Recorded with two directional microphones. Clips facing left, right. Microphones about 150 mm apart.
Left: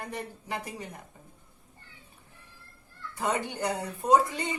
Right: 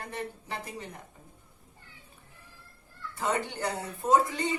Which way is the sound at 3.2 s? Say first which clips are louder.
Left 1 dB; 15° left (ahead or behind).